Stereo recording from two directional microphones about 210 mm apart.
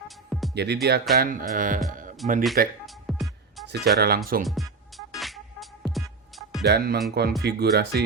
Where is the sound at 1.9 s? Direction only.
40° right (ahead or behind).